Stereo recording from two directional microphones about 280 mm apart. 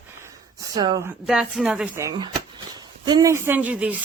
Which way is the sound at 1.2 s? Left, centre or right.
Centre.